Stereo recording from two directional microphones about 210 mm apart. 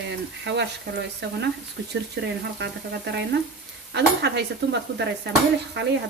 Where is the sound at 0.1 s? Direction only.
55° right (ahead or behind).